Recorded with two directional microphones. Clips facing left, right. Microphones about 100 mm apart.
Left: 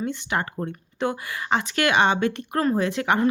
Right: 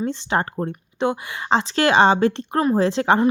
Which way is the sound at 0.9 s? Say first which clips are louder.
Right 4 dB; 20° right (ahead or behind).